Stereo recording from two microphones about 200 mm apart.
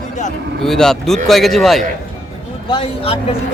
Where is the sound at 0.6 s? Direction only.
Centre (ahead or behind).